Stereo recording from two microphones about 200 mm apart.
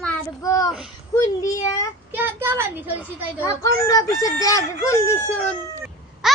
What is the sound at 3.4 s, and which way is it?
A child's voice, 15° left (ahead or behind).